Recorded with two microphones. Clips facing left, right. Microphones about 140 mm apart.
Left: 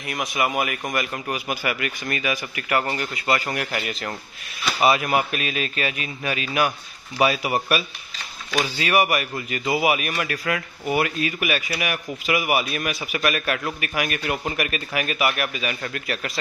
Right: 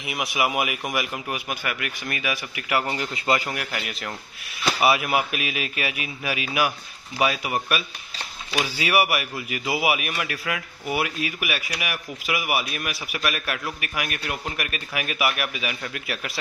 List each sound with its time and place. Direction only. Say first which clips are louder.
0.0 s a man's voice: left 1 dB; 10° right (ahead or behind)
3.0 s a man's voice: even; 20° right (ahead or behind)
3.4 s a man's voice: left 3 dB; centre (ahead or behind)
7.2 s a man's voice: left 3 dB; centre (ahead or behind)